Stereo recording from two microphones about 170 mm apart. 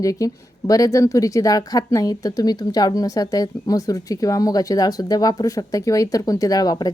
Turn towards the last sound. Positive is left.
turn(degrees=25)  # may be behind; listen again after turning